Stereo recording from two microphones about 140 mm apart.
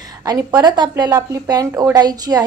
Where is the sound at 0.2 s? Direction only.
30° right (ahead or behind).